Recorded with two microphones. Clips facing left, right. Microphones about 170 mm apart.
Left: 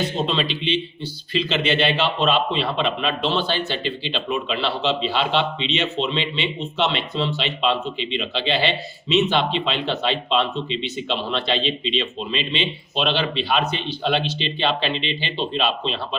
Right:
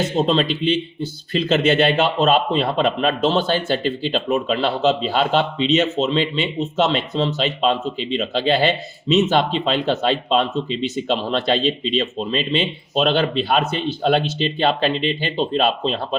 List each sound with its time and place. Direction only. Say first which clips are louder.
0.3 s speech: right 5 dB; 45° right (ahead or behind)